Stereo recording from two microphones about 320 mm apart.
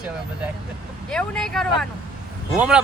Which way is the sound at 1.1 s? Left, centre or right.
Centre.